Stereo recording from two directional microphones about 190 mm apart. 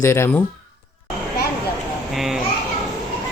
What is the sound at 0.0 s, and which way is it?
Speech, 15° left (ahead or behind).